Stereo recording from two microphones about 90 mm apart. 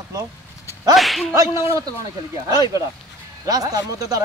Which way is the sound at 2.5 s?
40° right (ahead or behind).